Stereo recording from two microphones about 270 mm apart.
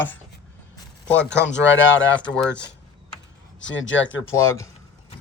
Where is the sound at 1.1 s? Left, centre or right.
Left.